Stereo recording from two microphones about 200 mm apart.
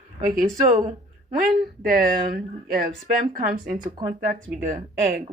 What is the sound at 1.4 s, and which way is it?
Speech, 45° right (ahead or behind).